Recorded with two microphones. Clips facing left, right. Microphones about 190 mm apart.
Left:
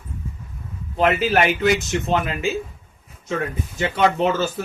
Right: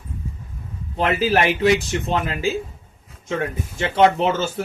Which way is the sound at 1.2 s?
30° right (ahead or behind).